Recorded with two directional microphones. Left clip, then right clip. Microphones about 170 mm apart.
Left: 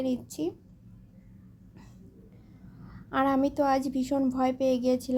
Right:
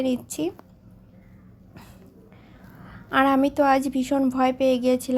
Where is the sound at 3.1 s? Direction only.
15° right (ahead or behind).